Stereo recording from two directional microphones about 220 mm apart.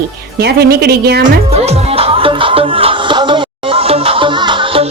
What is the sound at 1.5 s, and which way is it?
Music, 30° right (ahead or behind).